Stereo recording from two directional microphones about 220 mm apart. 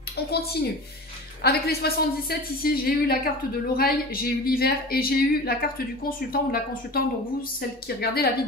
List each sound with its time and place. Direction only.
0.3 s a woman's voice: 45° left (ahead or behind)
8.0 s a woman's voice: 45° left (ahead or behind)